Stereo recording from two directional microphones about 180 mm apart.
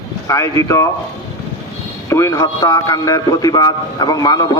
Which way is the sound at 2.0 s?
15° left (ahead or behind).